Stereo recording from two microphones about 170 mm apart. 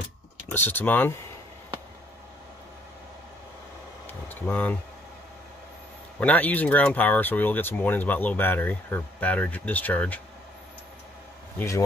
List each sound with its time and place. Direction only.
0.5 s speech: 10° left (ahead or behind)
4.1 s vehicle: 10° left (ahead or behind)
6.1 s speech: 10° left (ahead or behind)
11.5 s speech: 15° left (ahead or behind)